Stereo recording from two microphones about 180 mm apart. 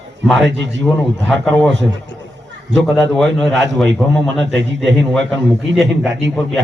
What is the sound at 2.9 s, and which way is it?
Speech, centre (ahead or behind).